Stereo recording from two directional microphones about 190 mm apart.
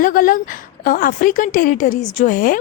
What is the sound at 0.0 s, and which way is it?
A woman's voice, 45° left (ahead or behind).